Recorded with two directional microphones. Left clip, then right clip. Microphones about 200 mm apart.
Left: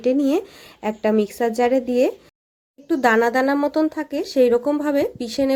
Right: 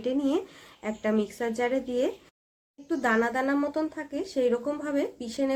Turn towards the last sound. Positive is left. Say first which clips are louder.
# left 8 dB
turn(degrees=40)  # may be behind; listen again after turning